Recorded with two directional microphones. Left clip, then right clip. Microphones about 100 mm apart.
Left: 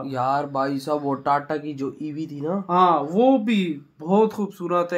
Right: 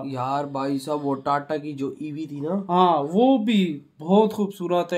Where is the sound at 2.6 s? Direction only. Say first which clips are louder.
Left 1 dB; 35° right (ahead or behind).